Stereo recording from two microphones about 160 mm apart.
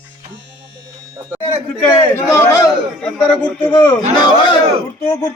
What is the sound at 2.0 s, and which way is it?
Speech, 15° left (ahead or behind).